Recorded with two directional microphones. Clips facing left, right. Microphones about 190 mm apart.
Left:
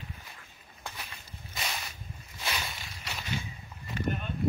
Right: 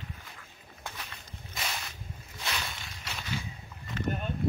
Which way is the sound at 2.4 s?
5° left (ahead or behind).